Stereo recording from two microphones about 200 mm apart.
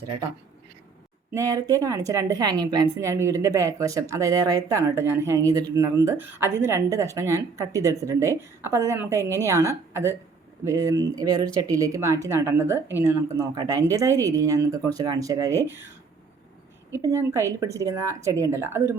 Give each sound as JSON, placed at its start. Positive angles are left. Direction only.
{"t": 1.3, "sound": "a woman's voice", "side_deg": -15}
{"t": 16.9, "sound": "a woman's voice", "side_deg": -15}